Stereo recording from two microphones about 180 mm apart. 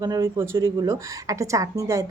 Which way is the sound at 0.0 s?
20° right (ahead or behind).